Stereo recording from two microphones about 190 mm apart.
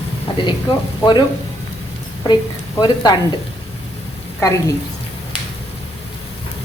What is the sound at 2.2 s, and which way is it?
Speech, 20° left (ahead or behind).